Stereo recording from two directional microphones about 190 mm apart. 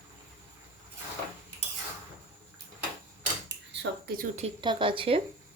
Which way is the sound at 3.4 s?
65° right (ahead or behind).